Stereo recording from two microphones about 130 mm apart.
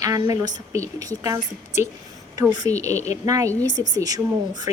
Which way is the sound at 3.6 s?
75° left (ahead or behind).